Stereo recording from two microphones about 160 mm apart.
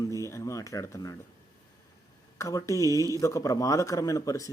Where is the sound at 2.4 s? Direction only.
20° left (ahead or behind).